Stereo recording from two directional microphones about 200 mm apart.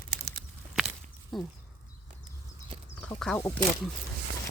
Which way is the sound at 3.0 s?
5° left (ahead or behind).